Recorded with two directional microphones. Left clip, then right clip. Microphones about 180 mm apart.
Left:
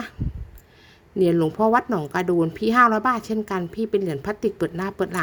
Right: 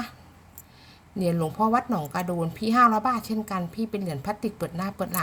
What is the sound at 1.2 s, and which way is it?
A woman's voice, 35° left (ahead or behind).